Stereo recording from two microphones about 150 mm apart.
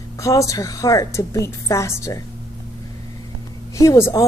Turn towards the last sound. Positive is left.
turn(degrees=20)  # may be behind; listen again after turning